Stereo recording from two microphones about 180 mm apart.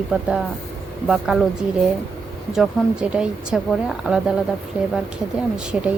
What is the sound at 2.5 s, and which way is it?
Speech, 5° right (ahead or behind).